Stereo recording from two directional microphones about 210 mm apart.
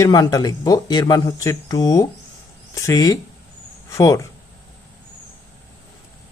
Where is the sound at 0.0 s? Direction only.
20° left (ahead or behind).